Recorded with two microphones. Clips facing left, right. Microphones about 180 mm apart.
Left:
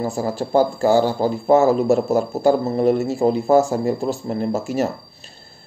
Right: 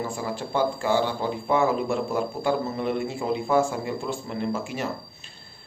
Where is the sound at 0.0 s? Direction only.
40° left (ahead or behind).